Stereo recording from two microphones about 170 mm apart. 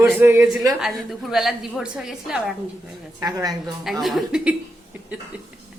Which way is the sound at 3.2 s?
25° right (ahead or behind).